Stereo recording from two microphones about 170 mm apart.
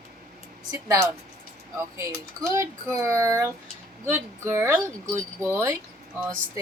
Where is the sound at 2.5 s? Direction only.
20° right (ahead or behind).